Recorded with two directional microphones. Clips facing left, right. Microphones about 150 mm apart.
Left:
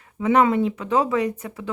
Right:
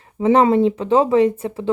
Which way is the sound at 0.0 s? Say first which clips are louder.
Right 4 dB; 30° right (ahead or behind).